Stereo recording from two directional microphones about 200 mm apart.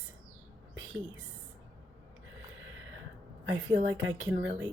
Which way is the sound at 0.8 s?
70° right (ahead or behind).